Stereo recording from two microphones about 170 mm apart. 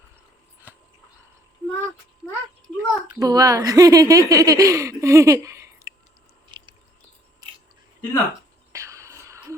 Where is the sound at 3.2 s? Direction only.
20° right (ahead or behind).